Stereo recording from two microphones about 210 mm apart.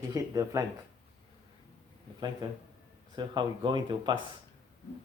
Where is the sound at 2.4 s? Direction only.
20° right (ahead or behind).